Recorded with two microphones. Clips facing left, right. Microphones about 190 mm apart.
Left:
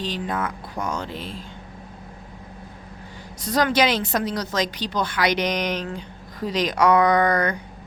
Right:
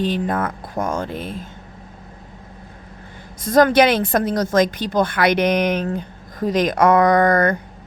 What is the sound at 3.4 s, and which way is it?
A woman's voice, 50° right (ahead or behind).